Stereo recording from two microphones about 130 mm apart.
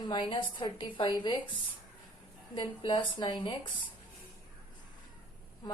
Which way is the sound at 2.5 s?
40° left (ahead or behind).